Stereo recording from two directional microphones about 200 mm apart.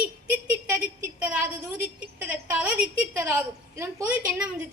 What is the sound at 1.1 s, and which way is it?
A woman's voice, 5° right (ahead or behind).